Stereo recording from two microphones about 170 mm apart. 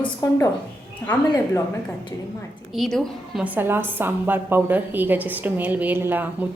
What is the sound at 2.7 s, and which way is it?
A woman's voice, centre (ahead or behind).